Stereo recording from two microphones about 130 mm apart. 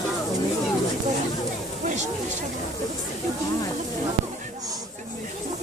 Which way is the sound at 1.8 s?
65° right (ahead or behind).